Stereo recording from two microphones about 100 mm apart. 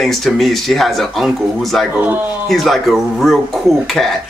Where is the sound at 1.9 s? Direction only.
15° right (ahead or behind).